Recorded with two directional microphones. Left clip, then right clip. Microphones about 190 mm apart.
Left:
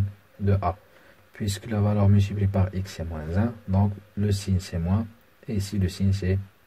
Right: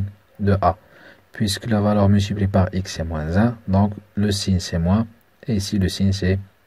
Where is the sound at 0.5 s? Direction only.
20° right (ahead or behind).